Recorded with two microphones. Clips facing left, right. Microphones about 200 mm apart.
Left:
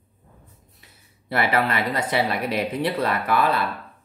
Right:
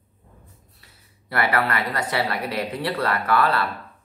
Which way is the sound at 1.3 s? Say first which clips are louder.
Left 1 dB; 20° left (ahead or behind).